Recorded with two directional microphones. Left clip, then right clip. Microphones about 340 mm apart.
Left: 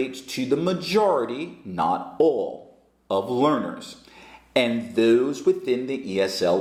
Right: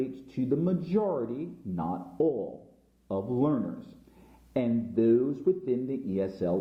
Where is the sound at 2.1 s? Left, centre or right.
Left.